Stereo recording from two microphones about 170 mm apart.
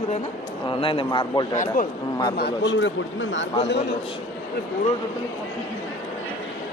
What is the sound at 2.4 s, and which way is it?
A man's voice, 90° left.